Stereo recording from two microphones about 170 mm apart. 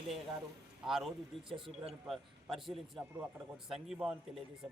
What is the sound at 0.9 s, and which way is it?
Speech, centre (ahead or behind).